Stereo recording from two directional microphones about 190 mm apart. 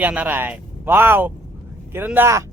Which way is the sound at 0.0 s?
10° right (ahead or behind).